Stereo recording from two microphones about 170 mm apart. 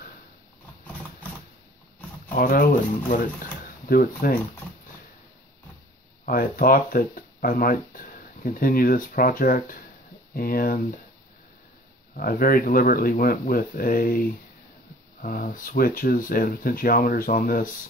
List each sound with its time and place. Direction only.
2.3 s speech: 60° left (ahead or behind)
3.8 s speech: 55° left (ahead or behind)
6.2 s speech: 60° left (ahead or behind)
12.2 s speech: 60° left (ahead or behind)
15.2 s speech: 55° left (ahead or behind)